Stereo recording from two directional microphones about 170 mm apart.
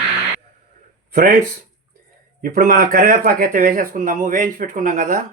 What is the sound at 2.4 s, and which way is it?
Speech, 55° right (ahead or behind).